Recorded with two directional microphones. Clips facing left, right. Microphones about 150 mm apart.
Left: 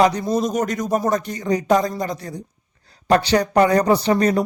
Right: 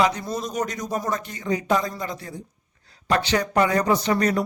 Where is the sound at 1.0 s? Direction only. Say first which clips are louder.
Left 6 dB; 40° left (ahead or behind).